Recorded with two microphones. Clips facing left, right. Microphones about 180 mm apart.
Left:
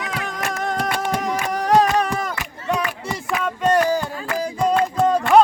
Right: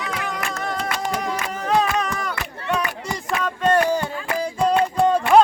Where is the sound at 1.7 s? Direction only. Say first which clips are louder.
Left 4 dB; 40° left (ahead or behind).